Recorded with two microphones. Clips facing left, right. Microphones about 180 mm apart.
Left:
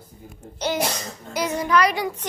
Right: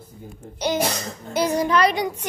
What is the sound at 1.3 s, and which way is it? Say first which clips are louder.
Child singing: right 1 dB; 30° right (ahead or behind).